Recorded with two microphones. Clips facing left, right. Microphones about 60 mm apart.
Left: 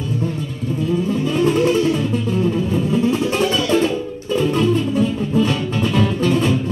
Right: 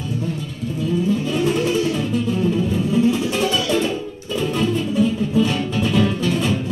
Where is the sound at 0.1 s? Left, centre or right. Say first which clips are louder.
Left 2 dB; left.